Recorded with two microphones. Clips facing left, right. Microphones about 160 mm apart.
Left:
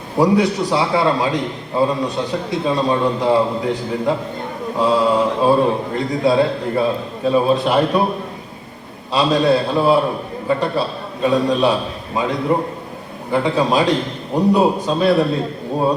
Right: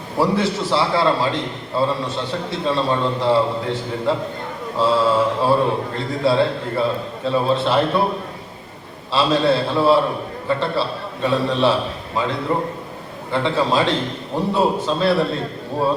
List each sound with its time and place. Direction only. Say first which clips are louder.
0.2 s a man's voice: left 4 dB; 20° left (ahead or behind)
9.1 s a man's voice: left 2 dB; 15° left (ahead or behind)